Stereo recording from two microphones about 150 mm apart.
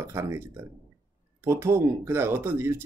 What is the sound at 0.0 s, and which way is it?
Speech, 15° right (ahead or behind).